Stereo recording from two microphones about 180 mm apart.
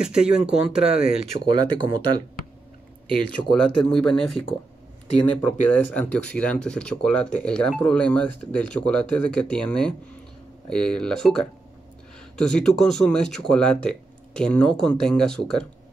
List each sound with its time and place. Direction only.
0.0 s speech: 5° right (ahead or behind)
0.8 s speech: 30° right (ahead or behind)
3.5 s speech: 5° left (ahead or behind)